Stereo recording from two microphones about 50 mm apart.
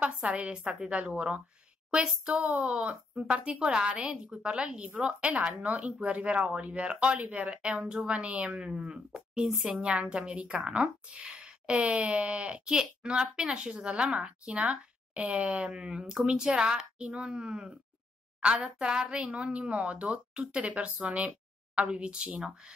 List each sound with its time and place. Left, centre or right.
0.0 s speech: right
2.4 s speech: right
11.2 s a sound: centre
11.8 s speech: right